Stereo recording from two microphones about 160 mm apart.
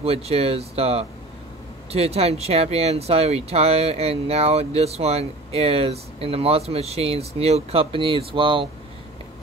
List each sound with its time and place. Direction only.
0.0 s speech: 40° right (ahead or behind)